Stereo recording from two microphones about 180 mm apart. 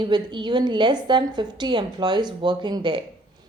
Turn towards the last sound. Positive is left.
turn(degrees=-25)  # may be behind; listen again after turning